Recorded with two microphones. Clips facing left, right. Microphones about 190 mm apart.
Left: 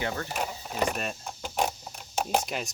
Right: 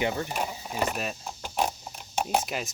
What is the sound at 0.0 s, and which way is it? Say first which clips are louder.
Speech: right 4 dB; 15° right (ahead or behind).